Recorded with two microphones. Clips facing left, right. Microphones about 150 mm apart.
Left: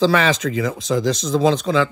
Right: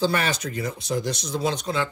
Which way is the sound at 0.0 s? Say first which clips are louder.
Left 7 dB; 90° left.